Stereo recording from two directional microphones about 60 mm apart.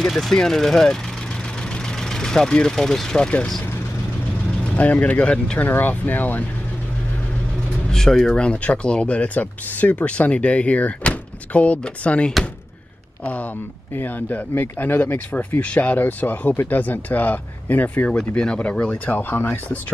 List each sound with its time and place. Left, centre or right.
0.0 s speech: centre
1.7 s vehicle: centre
4.7 s speech: left
5.7 s speech: left
7.9 s speech: centre; by 19.6 s left